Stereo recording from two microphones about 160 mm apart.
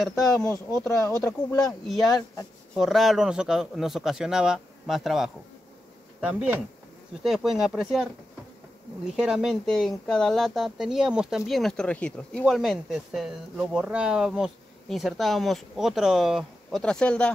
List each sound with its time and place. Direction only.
0.0 s speech: centre (ahead or behind)
0.5 s speech: 20° right (ahead or behind)
0.8 s speech: 15° left (ahead or behind)
1.7 s speech: centre (ahead or behind)